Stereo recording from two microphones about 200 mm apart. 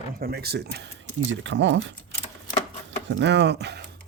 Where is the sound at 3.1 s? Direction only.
60° right (ahead or behind).